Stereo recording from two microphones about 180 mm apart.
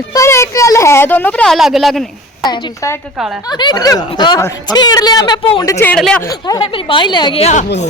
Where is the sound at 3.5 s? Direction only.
25° left (ahead or behind).